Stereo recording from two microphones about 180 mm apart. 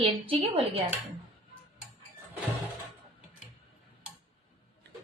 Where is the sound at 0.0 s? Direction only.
30° right (ahead or behind).